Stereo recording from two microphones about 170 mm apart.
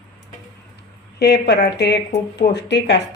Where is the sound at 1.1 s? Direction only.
85° left.